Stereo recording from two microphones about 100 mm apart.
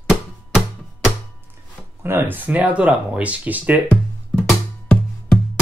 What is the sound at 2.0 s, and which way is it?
Speech, 20° right (ahead or behind).